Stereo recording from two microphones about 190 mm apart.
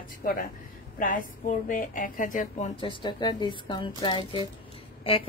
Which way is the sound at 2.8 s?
25° left (ahead or behind).